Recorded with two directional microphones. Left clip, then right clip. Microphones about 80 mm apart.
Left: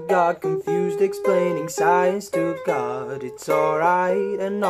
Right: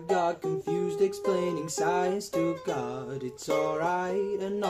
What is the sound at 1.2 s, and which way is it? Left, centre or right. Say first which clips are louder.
Music: left 8 dB; right.